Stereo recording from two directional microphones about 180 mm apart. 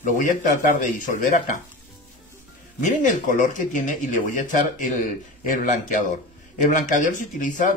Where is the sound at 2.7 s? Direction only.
45° left (ahead or behind).